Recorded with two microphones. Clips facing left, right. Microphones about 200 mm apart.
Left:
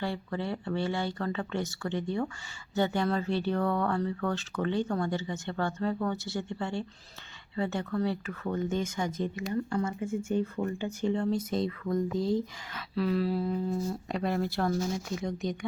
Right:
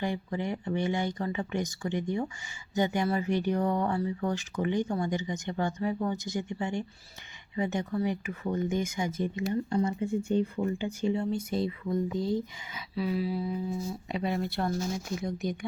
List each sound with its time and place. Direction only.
0.0 s speech: 15° right (ahead or behind)